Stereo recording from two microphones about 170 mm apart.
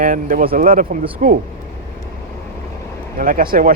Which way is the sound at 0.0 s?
55° right (ahead or behind).